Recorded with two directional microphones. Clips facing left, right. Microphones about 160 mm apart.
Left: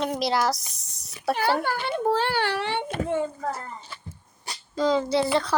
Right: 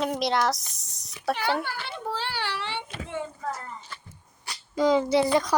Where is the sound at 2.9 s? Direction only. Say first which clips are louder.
Left 8 dB; 45° left (ahead or behind).